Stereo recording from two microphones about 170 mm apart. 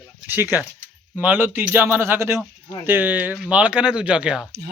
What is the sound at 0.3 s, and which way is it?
A man's voice, 10° right (ahead or behind).